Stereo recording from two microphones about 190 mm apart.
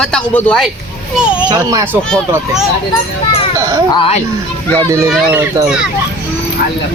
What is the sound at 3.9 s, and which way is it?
Speech, 30° left (ahead or behind).